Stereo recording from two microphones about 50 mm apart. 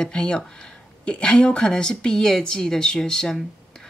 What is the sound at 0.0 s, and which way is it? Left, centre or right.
Speech, centre.